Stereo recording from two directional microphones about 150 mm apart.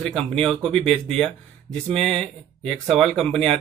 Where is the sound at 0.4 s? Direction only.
5° left (ahead or behind).